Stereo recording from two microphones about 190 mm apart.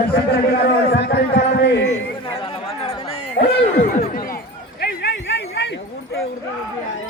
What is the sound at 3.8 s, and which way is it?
Speech, 40° left (ahead or behind).